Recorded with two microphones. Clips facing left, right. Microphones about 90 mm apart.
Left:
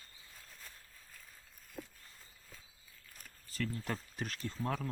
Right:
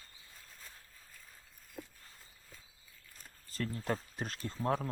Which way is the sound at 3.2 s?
35° right (ahead or behind).